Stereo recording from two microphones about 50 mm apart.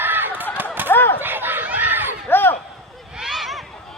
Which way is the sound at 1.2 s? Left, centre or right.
Right.